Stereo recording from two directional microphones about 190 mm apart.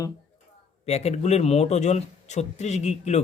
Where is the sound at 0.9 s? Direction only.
35° left (ahead or behind).